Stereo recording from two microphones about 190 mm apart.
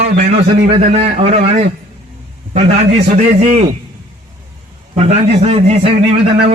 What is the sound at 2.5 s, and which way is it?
A man's voice, 35° right (ahead or behind).